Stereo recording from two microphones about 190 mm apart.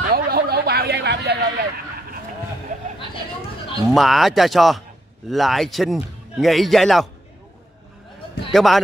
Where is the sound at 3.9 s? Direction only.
Centre (ahead or behind).